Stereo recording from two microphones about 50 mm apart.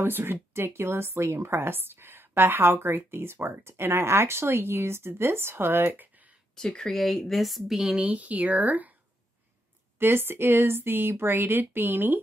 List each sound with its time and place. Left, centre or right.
0.0 s a woman's voice: right
6.5 s speech: centre
8.0 s speech: right
9.9 s a woman's voice: right